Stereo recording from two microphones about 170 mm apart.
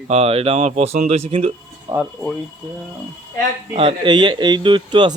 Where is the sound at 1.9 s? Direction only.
20° right (ahead or behind).